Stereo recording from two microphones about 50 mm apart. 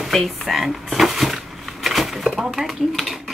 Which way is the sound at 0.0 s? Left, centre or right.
Centre.